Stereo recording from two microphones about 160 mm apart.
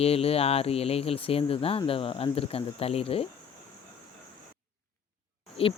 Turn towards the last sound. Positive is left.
turn(degrees=35)  # may be behind; listen again after turning